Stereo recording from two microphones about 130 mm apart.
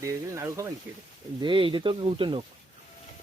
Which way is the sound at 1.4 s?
40° right (ahead or behind).